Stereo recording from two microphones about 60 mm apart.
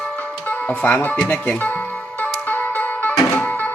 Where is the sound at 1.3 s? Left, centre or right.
Left.